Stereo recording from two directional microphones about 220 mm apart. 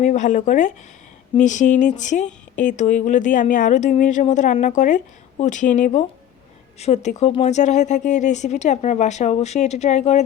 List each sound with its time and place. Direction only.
0.0 s speech: 35° left (ahead or behind)